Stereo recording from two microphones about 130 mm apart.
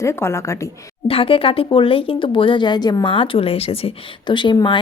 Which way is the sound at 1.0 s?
45° left (ahead or behind).